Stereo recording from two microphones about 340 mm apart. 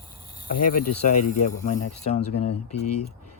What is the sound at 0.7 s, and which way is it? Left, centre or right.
Speech, left.